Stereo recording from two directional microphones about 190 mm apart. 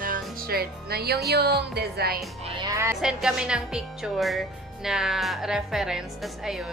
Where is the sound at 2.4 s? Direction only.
25° right (ahead or behind).